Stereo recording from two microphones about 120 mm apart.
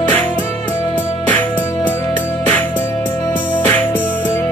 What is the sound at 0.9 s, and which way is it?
Music, 15° left (ahead or behind).